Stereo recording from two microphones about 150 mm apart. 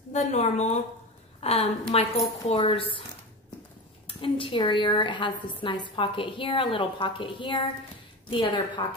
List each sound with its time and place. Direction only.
0.1 s a woman's voice: 50° left (ahead or behind)
4.1 s a woman's voice: 35° left (ahead or behind)